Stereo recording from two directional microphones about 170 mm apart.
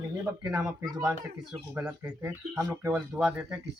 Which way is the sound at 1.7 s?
10° right (ahead or behind).